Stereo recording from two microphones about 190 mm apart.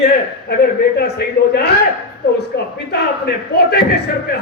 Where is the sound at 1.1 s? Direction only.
60° left (ahead or behind).